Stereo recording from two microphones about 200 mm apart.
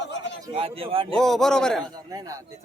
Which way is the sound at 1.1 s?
Centre (ahead or behind).